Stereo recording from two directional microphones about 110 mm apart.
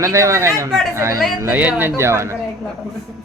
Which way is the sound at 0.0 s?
25° right (ahead or behind).